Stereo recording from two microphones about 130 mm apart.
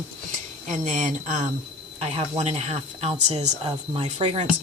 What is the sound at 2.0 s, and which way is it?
Speech, 60° right (ahead or behind).